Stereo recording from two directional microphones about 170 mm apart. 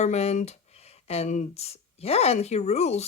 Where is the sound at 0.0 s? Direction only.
40° left (ahead or behind).